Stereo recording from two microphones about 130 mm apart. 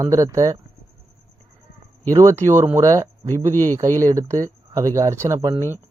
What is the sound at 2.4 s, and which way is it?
Speech, 20° right (ahead or behind).